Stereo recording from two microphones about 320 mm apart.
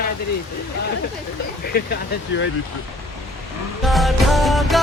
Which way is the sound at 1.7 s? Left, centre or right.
Left.